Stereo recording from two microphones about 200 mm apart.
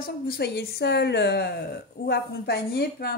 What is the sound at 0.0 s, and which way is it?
A woman's voice, 50° left (ahead or behind).